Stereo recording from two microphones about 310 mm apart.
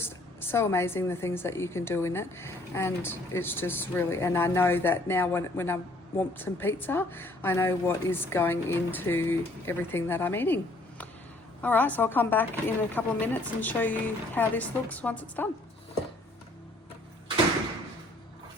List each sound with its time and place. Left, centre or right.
0.0 s a woman's voice: centre